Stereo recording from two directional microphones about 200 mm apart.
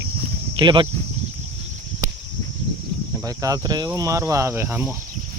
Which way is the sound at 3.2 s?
20° right (ahead or behind).